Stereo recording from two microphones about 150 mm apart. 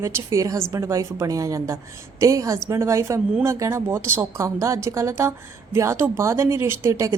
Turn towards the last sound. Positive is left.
turn(degrees=-20)  # may be behind; listen again after turning